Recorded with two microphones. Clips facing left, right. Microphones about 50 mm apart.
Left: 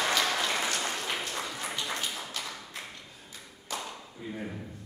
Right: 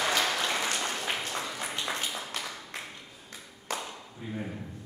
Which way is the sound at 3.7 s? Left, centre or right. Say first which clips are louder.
Right 2 dB; right.